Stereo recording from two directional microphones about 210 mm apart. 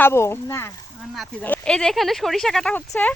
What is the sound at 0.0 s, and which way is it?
Speech, 10° left (ahead or behind).